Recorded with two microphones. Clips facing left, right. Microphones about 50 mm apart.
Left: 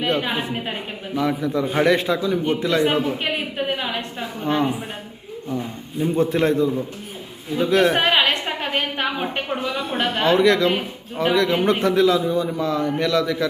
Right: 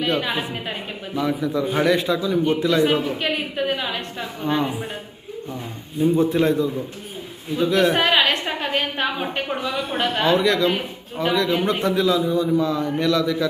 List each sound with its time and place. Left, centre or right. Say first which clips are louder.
0.0 s a man's voice: even; left
1.1 s a man's voice: left 1 dB; left
4.4 s a man's voice: left 1 dB; left
6.1 s a man's voice: left 3 dB; left